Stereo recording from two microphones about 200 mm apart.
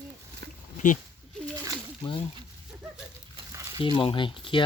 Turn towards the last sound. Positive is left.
turn(degrees=25)  # may be behind; listen again after turning